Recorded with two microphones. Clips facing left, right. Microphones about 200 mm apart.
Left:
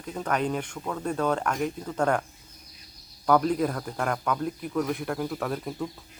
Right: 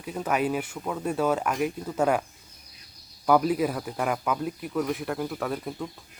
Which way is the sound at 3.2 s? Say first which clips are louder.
Right 1 dB; 5° right (ahead or behind).